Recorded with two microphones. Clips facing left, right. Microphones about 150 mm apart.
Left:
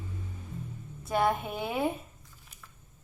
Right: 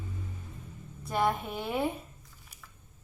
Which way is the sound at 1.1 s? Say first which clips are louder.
Left 2 dB; centre (ahead or behind).